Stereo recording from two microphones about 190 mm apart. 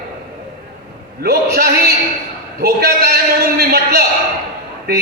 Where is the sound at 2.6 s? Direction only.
55° right (ahead or behind).